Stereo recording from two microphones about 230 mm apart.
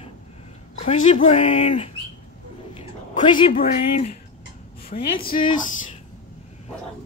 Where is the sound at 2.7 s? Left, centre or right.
Left.